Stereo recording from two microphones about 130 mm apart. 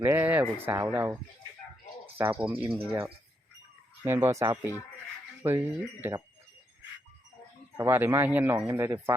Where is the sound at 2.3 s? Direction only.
15° right (ahead or behind).